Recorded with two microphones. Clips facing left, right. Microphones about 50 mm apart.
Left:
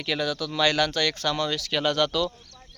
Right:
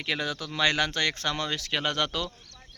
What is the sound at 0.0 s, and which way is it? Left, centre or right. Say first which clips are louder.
Speech: left 3 dB; right.